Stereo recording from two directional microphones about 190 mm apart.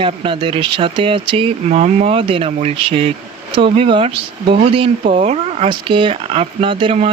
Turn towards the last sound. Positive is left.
turn(degrees=-25)  # may be behind; listen again after turning